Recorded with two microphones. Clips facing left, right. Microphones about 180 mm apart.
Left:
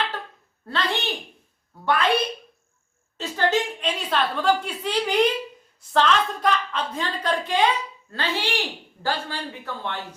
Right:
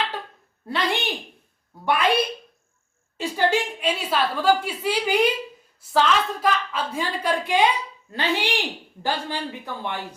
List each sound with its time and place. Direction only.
0.6 s a woman's voice: 15° right (ahead or behind)
3.2 s a woman's voice: 10° right (ahead or behind)